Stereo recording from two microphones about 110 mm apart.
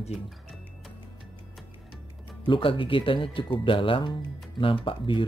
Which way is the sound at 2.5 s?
50° left (ahead or behind).